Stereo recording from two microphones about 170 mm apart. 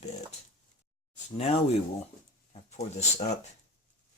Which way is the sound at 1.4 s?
40° left (ahead or behind).